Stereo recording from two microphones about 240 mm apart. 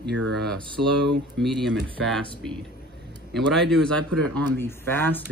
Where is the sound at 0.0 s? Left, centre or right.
Right.